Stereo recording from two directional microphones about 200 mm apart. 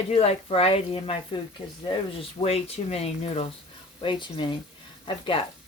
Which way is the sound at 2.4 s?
30° left (ahead or behind).